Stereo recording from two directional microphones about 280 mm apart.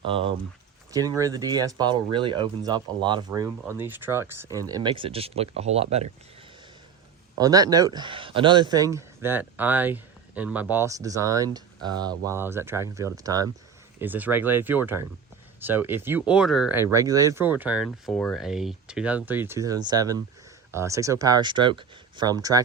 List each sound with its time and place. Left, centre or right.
0.0 s speech: centre
7.3 s speech: centre